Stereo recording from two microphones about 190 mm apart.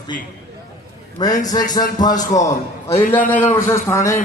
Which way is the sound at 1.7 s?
20° left (ahead or behind).